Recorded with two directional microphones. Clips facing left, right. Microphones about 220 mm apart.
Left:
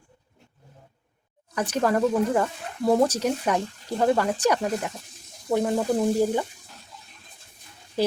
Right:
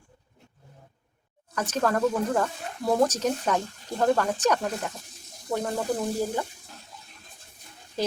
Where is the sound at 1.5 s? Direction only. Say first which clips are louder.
Left 3 dB; 10° left (ahead or behind).